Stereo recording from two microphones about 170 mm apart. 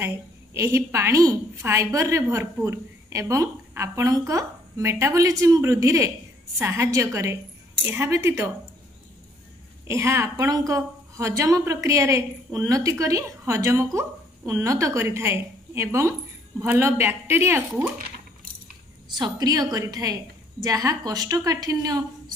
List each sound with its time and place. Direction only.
0.0 s a woman's voice: 15° right (ahead or behind)
9.8 s a woman's voice: 15° right (ahead or behind)
19.1 s a woman's voice: 25° right (ahead or behind)